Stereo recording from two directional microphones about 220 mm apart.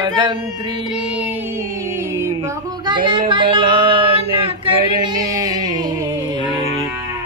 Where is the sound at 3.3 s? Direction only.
20° right (ahead or behind).